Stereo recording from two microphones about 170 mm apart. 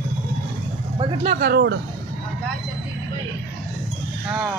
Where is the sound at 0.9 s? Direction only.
25° right (ahead or behind).